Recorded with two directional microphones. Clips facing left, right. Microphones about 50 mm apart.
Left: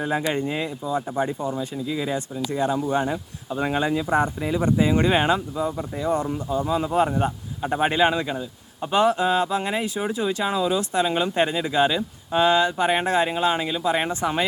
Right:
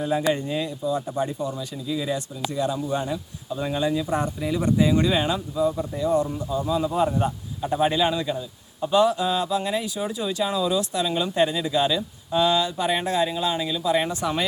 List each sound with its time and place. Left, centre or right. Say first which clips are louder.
0.0 s a man's voice: right 1 dB; left
4.1 s speech: left 3 dB; left
5.1 s a man's voice: left 3 dB; left
7.2 s a man's voice: left 1 dB; left